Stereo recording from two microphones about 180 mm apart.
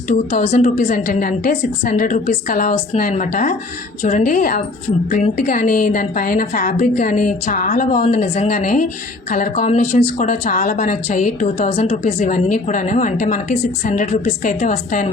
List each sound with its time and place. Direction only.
0.1 s speech: 45° left (ahead or behind)